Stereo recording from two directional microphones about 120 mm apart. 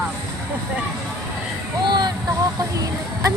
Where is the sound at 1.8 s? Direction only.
40° right (ahead or behind).